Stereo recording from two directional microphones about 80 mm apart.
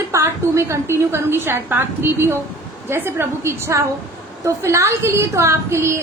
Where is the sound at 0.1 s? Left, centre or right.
Right.